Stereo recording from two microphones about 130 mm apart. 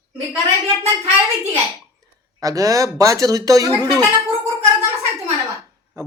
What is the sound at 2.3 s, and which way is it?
Speech, 25° right (ahead or behind).